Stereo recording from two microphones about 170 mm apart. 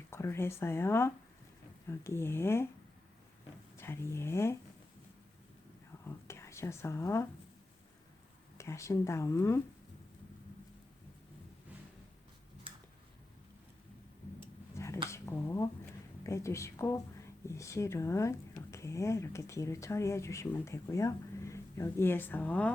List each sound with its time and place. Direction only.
0.1 s speech: 15° left (ahead or behind)
3.8 s speech: 15° left (ahead or behind)
6.1 s speech: 15° left (ahead or behind)
8.5 s speech: 15° left (ahead or behind)
15.1 s speech: 15° left (ahead or behind)